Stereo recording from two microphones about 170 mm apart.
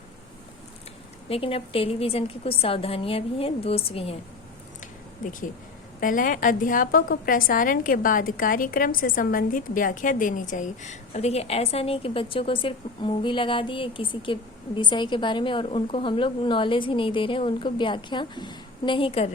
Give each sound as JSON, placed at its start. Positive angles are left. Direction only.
{"t": 1.3, "sound": "a woman's voice", "side_deg": 35}
{"t": 5.2, "sound": "a woman's voice", "side_deg": 50}